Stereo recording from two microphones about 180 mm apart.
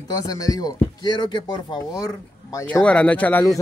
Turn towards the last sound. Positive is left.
turn(degrees=15)  # may be behind; listen again after turning